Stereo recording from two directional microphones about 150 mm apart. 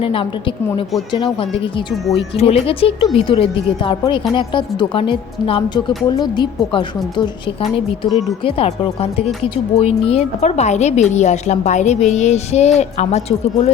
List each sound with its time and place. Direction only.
0.0 s a woman's voice: 35° left (ahead or behind)